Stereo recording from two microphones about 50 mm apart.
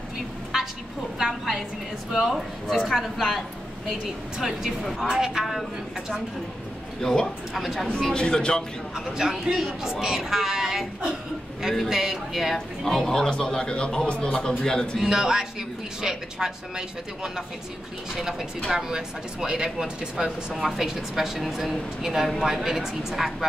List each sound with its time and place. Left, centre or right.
1.1 s speech: centre
7.0 s speech: centre
8.1 s a man's voice: centre
8.9 s speech: centre
12.5 s a man's voice: centre
15.0 s speech: centre
18.7 s speech: centre